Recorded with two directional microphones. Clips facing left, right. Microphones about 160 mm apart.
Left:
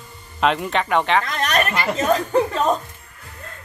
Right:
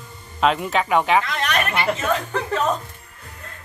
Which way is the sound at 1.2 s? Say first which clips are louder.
Left 2 dB; 40° left (ahead or behind).